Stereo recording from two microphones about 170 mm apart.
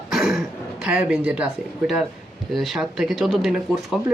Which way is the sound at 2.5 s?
Centre (ahead or behind).